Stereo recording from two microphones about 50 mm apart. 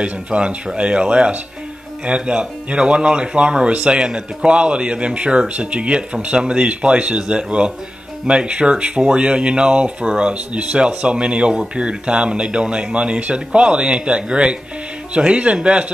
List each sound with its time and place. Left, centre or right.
0.0 s speech: right